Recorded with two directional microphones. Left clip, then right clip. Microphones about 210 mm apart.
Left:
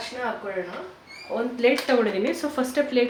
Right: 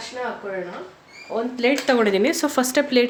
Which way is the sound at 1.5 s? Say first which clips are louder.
Right 1 dB; 50° right (ahead or behind).